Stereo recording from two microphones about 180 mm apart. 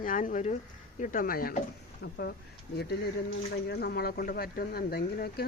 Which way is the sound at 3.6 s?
65° left (ahead or behind).